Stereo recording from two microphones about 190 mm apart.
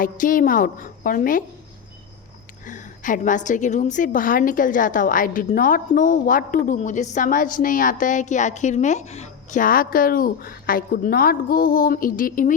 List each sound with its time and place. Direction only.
0.0 s a woman's voice: 45° left (ahead or behind)
2.6 s a woman's voice: 45° left (ahead or behind)